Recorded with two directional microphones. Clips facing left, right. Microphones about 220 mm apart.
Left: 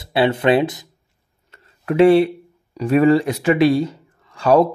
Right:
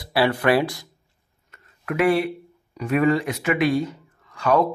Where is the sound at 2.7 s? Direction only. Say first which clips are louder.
Left 6 dB; 30° left (ahead or behind).